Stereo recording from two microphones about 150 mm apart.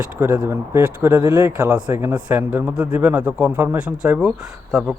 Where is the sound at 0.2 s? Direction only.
15° right (ahead or behind).